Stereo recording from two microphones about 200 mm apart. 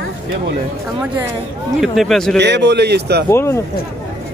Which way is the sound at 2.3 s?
60° right (ahead or behind).